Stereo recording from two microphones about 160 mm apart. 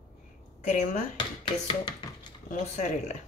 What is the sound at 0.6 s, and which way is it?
Speech, 50° left (ahead or behind).